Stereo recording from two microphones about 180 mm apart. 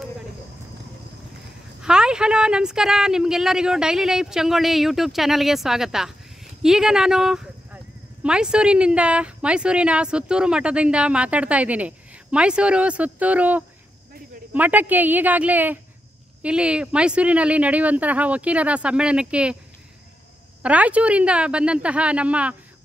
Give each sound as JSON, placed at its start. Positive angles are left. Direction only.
{"t": 1.8, "sound": "speech", "side_deg": -5}
{"t": 20.6, "sound": "speech", "side_deg": -10}